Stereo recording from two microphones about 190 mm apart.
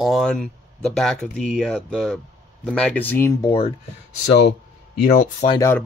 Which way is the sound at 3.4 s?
25° left (ahead or behind).